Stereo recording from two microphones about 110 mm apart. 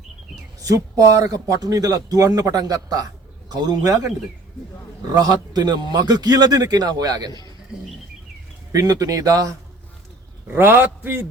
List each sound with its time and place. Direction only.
0.6 s speech: 30° right (ahead or behind)
5.1 s speech: 35° right (ahead or behind)
8.7 s speech: 35° right (ahead or behind)
10.4 s a man's voice: 20° right (ahead or behind)